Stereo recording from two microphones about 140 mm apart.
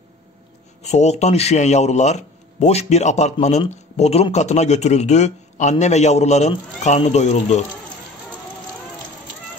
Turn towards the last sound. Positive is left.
turn(degrees=55)  # may be behind; listen again after turning